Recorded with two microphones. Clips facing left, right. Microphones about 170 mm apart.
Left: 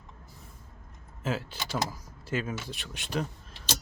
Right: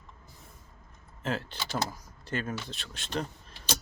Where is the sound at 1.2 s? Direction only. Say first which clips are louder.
Left 1 dB; 5° left (ahead or behind).